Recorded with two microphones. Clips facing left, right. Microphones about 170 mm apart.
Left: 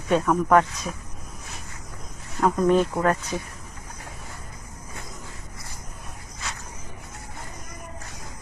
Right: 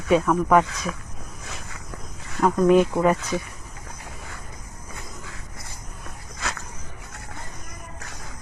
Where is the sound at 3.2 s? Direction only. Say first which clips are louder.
Right 3 dB; 90° right.